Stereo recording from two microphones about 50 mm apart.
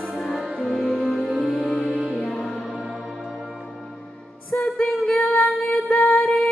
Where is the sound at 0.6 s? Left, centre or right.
Centre.